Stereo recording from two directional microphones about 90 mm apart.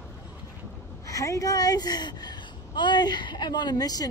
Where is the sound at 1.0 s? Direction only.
35° left (ahead or behind).